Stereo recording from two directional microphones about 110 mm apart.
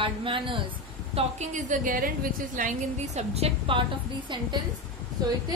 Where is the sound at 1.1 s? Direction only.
65° right (ahead or behind).